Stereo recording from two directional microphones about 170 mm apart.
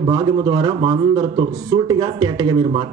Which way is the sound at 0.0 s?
25° right (ahead or behind).